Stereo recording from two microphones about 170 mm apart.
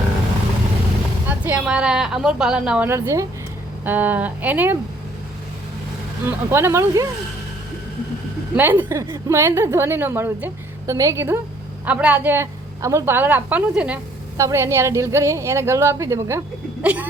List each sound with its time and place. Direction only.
1.3 s a woman's voice: 10° right (ahead or behind)
6.2 s a woman's voice: 15° right (ahead or behind)
8.5 s a woman's voice: 10° right (ahead or behind)